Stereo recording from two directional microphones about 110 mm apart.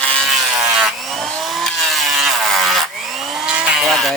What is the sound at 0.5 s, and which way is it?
Wood, 5° right (ahead or behind).